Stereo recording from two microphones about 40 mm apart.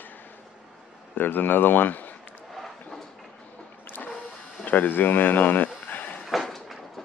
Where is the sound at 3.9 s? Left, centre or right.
Left.